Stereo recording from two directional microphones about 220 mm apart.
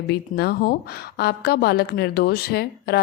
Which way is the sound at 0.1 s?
45° left (ahead or behind).